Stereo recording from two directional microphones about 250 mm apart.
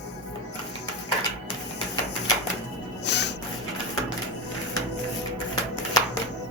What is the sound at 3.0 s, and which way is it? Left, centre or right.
Music, left.